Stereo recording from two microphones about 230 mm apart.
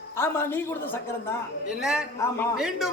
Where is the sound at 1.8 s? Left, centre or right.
Centre.